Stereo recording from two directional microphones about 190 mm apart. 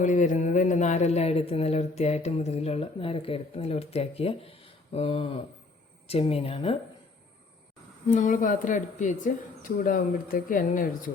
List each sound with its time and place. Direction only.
0.0 s speech: 40° left (ahead or behind)
8.0 s speech: 40° left (ahead or behind)